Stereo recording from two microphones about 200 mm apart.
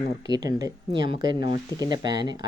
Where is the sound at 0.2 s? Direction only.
20° right (ahead or behind).